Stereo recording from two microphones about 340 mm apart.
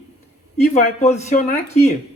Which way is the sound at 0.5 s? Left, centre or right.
Centre.